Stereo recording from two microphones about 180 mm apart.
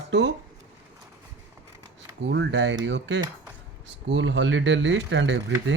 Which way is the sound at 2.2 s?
75° right (ahead or behind).